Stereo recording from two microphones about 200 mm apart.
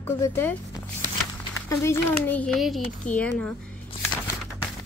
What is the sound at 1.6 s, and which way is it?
A child's voice, 15° left (ahead or behind).